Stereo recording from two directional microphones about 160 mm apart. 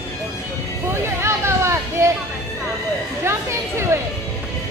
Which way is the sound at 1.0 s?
15° right (ahead or behind).